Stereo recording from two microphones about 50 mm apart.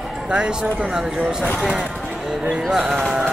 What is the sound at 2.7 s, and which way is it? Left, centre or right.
Speech, centre.